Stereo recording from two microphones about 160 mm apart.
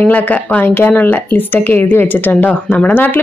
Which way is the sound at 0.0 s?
10° left (ahead or behind).